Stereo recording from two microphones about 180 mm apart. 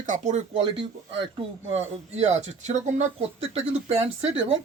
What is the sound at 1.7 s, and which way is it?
A man's voice, 35° right (ahead or behind).